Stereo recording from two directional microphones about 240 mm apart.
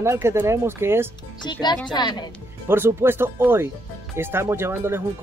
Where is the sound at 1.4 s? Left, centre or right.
Centre.